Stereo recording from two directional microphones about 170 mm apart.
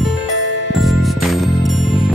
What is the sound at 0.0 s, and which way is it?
Music, centre (ahead or behind).